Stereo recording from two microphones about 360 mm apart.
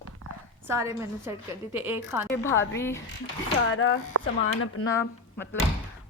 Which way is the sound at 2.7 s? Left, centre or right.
Centre.